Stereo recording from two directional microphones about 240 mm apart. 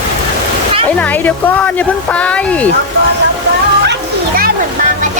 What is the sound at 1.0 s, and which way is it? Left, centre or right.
Speech, centre.